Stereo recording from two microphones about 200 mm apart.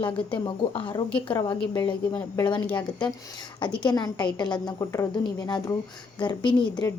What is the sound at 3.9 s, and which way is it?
A woman's voice, 20° left (ahead or behind).